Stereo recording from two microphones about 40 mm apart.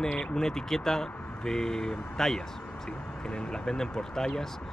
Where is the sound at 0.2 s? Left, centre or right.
Centre.